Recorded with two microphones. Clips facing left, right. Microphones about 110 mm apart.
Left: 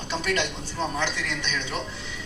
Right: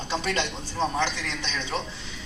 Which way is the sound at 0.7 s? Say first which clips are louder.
Right 2 dB; 35° right (ahead or behind).